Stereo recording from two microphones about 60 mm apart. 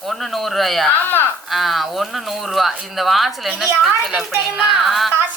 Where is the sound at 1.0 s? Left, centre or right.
Left.